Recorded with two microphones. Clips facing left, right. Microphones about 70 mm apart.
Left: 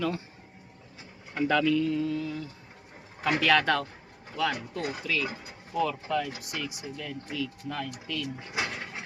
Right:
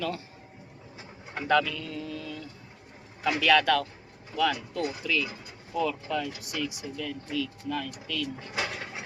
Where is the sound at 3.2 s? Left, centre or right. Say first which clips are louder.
Left 1 dB; left.